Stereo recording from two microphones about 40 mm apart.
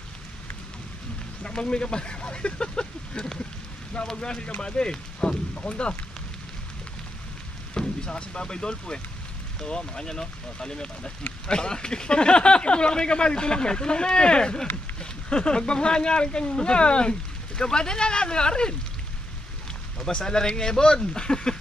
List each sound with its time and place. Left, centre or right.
1.4 s speech: left
7.7 s speech: left
20.1 s speech: centre